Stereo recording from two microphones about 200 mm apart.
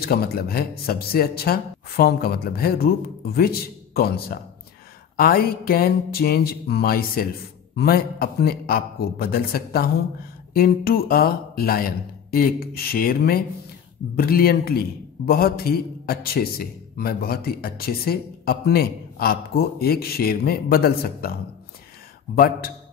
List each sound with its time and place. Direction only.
0.0 s a man's voice: 50° left (ahead or behind)
22.3 s a man's voice: 45° left (ahead or behind)